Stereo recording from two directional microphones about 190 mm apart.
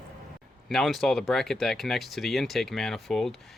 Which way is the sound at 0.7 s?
Centre (ahead or behind).